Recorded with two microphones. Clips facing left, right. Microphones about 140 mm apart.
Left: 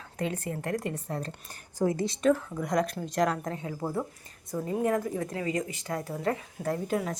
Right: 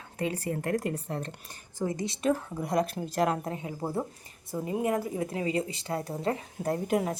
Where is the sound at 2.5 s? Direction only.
30° right (ahead or behind).